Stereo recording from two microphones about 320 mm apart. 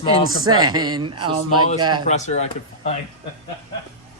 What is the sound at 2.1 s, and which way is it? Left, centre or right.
Speech, left.